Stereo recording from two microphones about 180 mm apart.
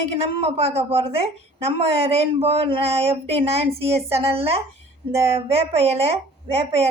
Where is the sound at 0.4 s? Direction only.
35° right (ahead or behind).